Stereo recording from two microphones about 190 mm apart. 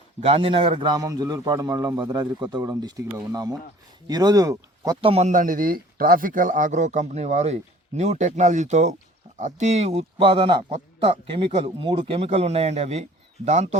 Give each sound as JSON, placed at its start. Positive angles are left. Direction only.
{"t": 0.2, "sound": "a man's voice", "side_deg": -30}
{"t": 5.3, "sound": "speech", "side_deg": -45}